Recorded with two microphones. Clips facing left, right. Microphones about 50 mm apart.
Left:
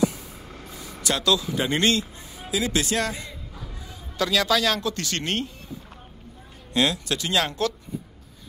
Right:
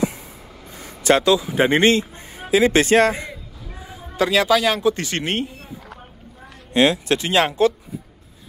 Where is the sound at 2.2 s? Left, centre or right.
Right.